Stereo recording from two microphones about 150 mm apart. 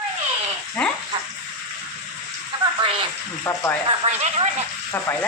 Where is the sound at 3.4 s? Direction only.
15° left (ahead or behind).